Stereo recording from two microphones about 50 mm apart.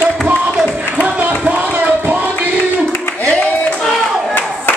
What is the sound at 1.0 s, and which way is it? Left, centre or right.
Crowd, right.